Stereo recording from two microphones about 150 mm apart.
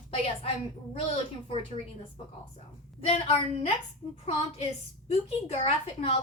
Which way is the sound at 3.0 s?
40° left (ahead or behind).